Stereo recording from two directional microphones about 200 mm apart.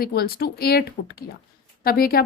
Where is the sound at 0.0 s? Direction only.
50° left (ahead or behind).